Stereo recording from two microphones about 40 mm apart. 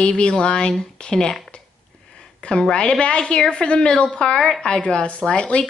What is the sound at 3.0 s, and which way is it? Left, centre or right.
A woman's voice, left.